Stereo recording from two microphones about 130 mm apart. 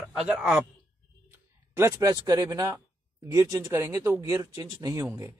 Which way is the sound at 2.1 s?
25° right (ahead or behind).